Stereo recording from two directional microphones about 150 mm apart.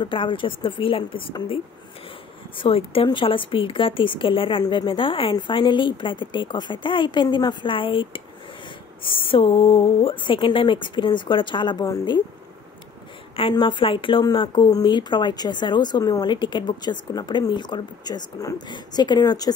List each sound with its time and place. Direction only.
0.0 s speech: 35° left (ahead or behind)
13.4 s speech: 35° left (ahead or behind)